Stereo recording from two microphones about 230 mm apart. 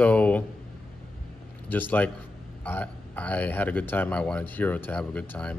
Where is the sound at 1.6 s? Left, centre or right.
Centre.